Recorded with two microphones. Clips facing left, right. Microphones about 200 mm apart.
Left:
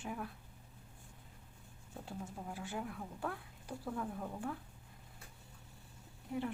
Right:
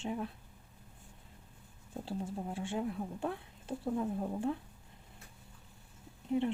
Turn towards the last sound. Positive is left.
turn(degrees=-20)  # may be behind; listen again after turning